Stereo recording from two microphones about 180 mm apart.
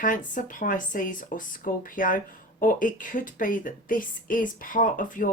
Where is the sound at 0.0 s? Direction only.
45° left (ahead or behind).